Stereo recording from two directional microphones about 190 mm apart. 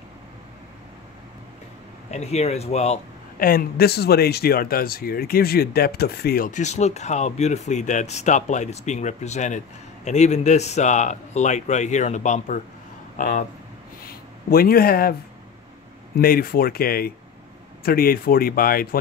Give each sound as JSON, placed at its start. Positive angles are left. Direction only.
{"t": 2.0, "sound": "a man's voice", "side_deg": 35}
{"t": 3.3, "sound": "a man's voice", "side_deg": 50}
{"t": 16.2, "sound": "speech", "side_deg": 50}